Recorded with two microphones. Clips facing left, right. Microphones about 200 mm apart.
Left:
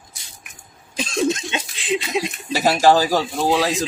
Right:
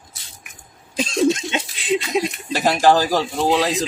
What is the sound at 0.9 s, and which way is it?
Cough, 20° right (ahead or behind).